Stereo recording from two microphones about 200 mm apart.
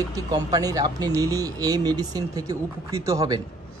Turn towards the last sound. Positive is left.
turn(degrees=-15)  # may be behind; listen again after turning